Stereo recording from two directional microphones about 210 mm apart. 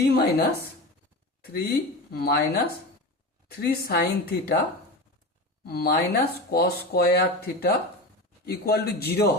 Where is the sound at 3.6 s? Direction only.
45° left (ahead or behind).